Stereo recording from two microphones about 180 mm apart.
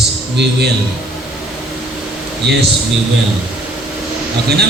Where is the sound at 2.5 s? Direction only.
70° right (ahead or behind).